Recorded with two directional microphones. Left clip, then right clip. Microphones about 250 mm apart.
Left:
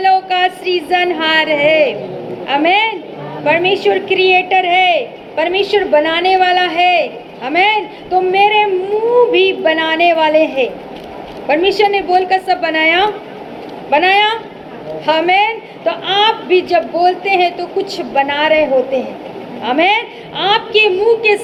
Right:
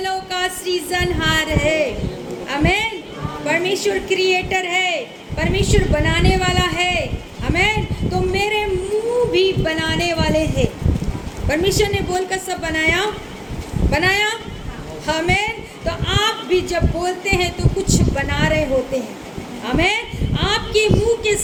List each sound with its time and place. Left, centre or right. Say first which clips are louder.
0.0 s music: left 10 dB; centre
2.5 s a woman's voice: left 7 dB; centre
19.6 s a woman's voice: left 6 dB; centre